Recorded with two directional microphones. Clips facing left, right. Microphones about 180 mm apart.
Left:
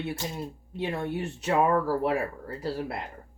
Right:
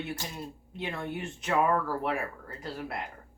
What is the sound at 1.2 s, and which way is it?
Speech, 30° left (ahead or behind).